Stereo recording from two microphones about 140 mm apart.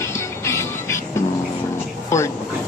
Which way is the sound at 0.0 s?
20° left (ahead or behind).